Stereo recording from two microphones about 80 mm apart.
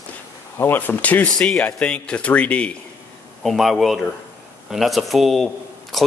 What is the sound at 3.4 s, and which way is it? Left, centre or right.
Speech, centre.